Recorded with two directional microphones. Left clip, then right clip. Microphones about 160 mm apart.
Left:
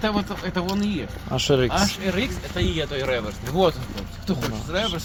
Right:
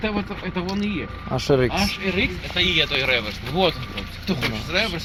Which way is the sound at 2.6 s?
20° left (ahead or behind).